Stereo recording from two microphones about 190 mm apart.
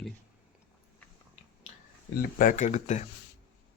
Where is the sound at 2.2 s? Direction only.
45° left (ahead or behind).